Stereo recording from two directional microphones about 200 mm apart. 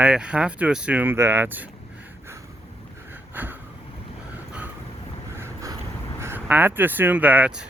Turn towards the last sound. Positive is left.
turn(degrees=-5)  # may be behind; listen again after turning